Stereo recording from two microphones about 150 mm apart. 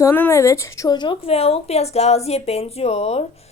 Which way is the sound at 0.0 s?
15° left (ahead or behind).